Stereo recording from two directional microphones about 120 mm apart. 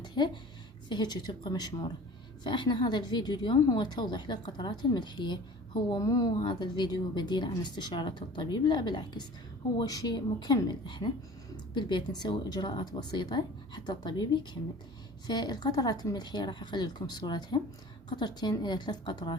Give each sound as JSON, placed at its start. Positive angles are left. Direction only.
{"t": 0.2, "sound": "speech", "side_deg": 40}